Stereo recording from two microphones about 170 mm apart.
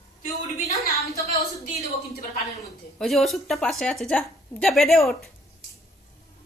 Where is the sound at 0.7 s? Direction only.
20° left (ahead or behind).